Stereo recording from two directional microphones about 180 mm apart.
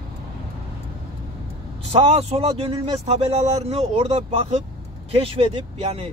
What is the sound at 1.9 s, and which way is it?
Speech, 35° right (ahead or behind).